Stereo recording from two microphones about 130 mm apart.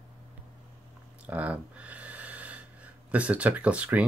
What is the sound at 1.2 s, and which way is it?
Speech, 10° right (ahead or behind).